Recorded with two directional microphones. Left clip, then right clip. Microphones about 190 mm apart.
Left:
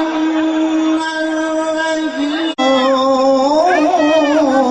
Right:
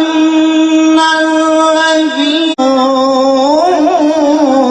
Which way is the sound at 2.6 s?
20° right (ahead or behind).